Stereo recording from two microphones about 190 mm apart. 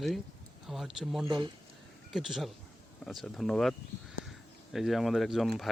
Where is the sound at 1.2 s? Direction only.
25° right (ahead or behind).